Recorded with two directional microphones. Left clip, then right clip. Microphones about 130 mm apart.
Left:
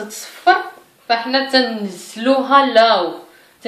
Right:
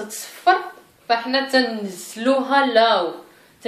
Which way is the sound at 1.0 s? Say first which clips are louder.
Left 3 dB; 35° right (ahead or behind).